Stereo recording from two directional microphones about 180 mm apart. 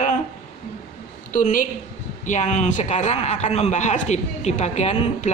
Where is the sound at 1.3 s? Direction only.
45° left (ahead or behind).